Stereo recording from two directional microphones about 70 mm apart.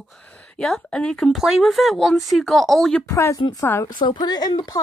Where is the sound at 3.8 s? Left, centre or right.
Left.